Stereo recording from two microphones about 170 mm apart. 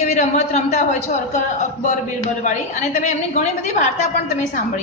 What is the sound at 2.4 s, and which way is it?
A woman's voice, 45° left (ahead or behind).